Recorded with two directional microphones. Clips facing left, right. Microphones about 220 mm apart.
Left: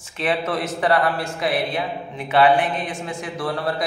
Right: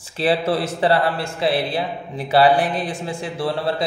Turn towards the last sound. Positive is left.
turn(degrees=-25)  # may be behind; listen again after turning